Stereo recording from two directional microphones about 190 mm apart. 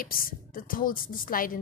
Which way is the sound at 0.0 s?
50° left (ahead or behind).